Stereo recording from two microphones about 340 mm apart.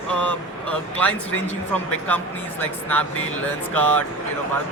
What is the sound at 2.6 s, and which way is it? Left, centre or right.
Speech, centre.